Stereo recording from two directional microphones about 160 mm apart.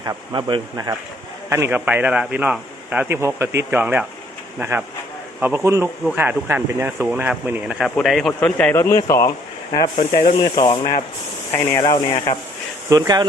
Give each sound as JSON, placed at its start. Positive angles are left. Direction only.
{"t": 0.0, "sound": "speech", "side_deg": -25}
{"t": 1.5, "sound": "speech", "side_deg": -15}
{"t": 5.4, "sound": "speech", "side_deg": -15}
{"t": 7.9, "sound": "speech", "side_deg": 0}
{"t": 8.3, "sound": "a man's voice", "side_deg": 10}
{"t": 10.0, "sound": "speech", "side_deg": 60}
{"t": 10.6, "sound": "speech", "side_deg": 35}
{"t": 11.5, "sound": "a man's voice", "side_deg": 15}
{"t": 11.8, "sound": "speech", "side_deg": 30}
{"t": 12.9, "sound": "speech", "side_deg": -25}